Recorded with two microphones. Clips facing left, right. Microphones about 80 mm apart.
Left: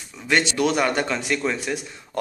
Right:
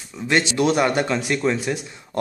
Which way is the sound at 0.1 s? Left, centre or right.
Centre.